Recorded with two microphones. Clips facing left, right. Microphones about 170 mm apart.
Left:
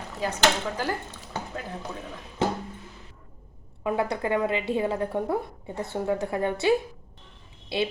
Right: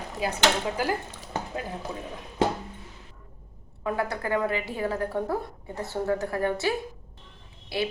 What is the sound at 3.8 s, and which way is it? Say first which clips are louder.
A woman's voice: left 2 dB; 20° left (ahead or behind).